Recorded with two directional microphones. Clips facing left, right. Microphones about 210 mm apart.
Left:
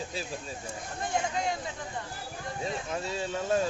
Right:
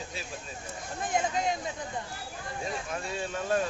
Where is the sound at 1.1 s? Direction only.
20° right (ahead or behind).